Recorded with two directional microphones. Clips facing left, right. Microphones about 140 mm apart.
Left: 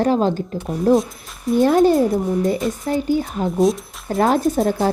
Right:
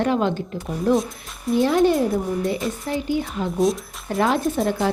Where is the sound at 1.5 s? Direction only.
45° left (ahead or behind).